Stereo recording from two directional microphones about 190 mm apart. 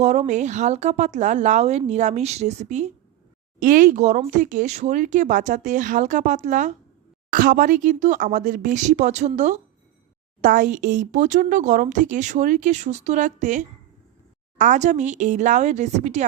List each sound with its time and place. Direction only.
0.0 s speech: 35° right (ahead or behind)